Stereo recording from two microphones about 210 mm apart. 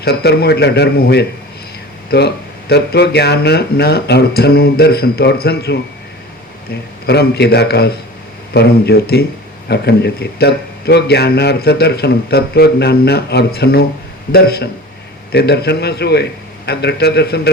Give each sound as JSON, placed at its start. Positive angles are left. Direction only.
{"t": 0.0, "sound": "a man's voice", "side_deg": 50}
{"t": 7.1, "sound": "a man's voice", "side_deg": 50}